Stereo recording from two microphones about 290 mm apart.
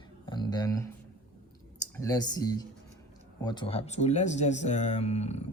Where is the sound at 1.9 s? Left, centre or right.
Centre.